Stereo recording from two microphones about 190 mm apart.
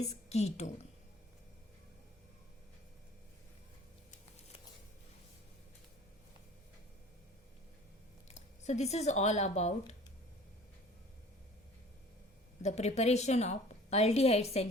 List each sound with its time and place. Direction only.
0.0 s a woman's voice: 35° left (ahead or behind)
8.6 s a woman's voice: 35° left (ahead or behind)
12.6 s a woman's voice: 35° left (ahead or behind)